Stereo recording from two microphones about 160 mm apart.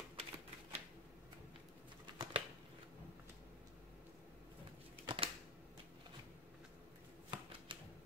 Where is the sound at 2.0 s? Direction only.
30° right (ahead or behind).